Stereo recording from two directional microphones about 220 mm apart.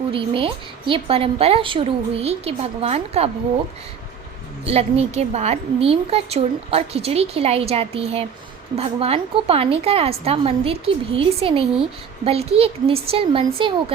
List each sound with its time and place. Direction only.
0.1 s a woman's voice: 25° right (ahead or behind)
4.6 s a woman's voice: 30° right (ahead or behind)